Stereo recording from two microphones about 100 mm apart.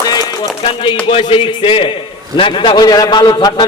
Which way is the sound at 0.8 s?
60° left (ahead or behind).